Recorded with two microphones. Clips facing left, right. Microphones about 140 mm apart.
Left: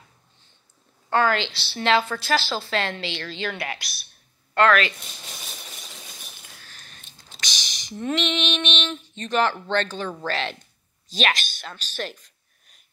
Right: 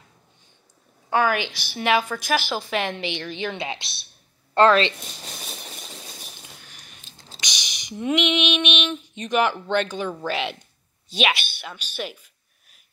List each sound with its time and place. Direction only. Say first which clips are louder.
1.1 s a woman's voice: even; 10° right (ahead or behind); by 4.9 s 30° right (ahead or behind)
6.6 s biting: even; 15° right (ahead or behind)
7.3 s female singing: even; 15° right (ahead or behind)
11.1 s a sound: right 1 dB; 10° right (ahead or behind)